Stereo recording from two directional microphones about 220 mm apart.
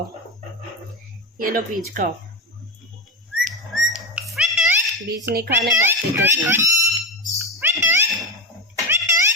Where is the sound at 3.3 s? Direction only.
Centre (ahead or behind).